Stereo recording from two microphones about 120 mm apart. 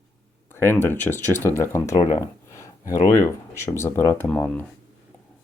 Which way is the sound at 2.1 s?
25° left (ahead or behind).